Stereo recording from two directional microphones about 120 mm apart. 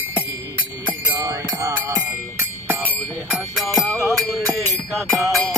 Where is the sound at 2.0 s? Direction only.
20° right (ahead or behind).